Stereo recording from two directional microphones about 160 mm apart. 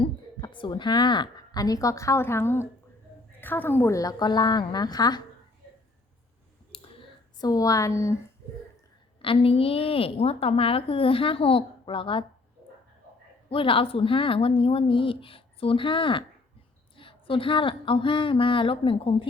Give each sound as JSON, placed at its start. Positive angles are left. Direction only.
{"t": 0.0, "sound": "a woman's voice", "side_deg": 30}
{"t": 7.3, "sound": "a woman's voice", "side_deg": 25}
{"t": 9.2, "sound": "a woman's voice", "side_deg": 35}
{"t": 13.5, "sound": "a woman's voice", "side_deg": 35}